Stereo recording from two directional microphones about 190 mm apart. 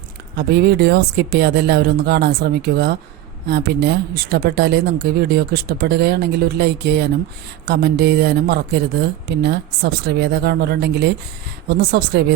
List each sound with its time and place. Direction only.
0.3 s speech: 60° right (ahead or behind)